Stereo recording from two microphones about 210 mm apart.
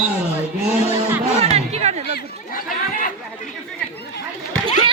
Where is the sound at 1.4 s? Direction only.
30° right (ahead or behind).